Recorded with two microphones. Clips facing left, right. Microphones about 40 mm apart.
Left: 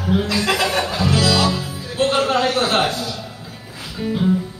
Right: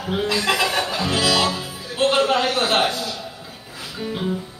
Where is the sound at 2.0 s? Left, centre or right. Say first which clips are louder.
Left 1 dB; centre.